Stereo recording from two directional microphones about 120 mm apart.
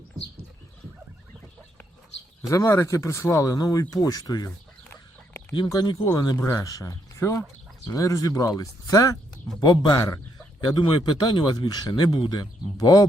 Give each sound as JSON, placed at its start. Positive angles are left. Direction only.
{"t": 2.5, "sound": "speech", "side_deg": 25}
{"t": 5.6, "sound": "speech", "side_deg": 35}
{"t": 10.8, "sound": "speech", "side_deg": 45}